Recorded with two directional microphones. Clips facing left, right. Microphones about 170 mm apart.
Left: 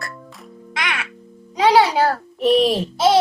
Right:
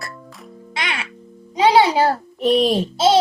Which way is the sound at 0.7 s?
30° right (ahead or behind).